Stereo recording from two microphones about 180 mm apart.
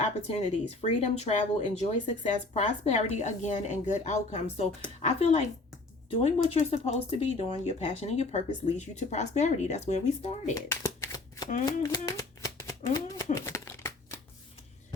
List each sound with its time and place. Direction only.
0.3 s speech: 35° left (ahead or behind)
10.5 s shuffling cards: 15° left (ahead or behind)